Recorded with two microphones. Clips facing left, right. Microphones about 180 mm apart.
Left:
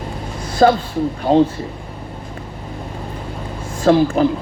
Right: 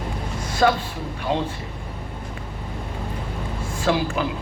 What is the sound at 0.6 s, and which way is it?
Speech, 35° left (ahead or behind).